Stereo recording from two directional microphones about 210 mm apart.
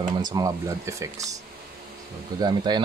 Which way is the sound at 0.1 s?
20° right (ahead or behind).